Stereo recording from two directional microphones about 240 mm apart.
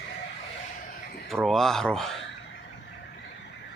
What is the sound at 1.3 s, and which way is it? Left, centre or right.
Speech, centre.